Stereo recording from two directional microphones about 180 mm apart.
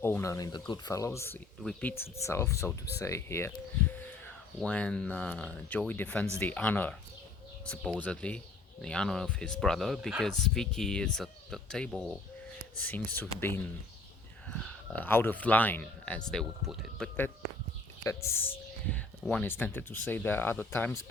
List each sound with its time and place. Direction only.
0.0 s speech: 15° left (ahead or behind)
4.6 s speech: 5° left (ahead or behind)
14.9 s speech: 10° left (ahead or behind)